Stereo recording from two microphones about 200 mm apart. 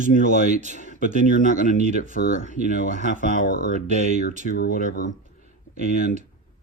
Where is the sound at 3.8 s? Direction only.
35° right (ahead or behind).